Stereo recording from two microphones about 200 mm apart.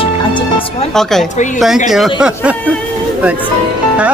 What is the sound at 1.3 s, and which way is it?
Speech, 40° left (ahead or behind).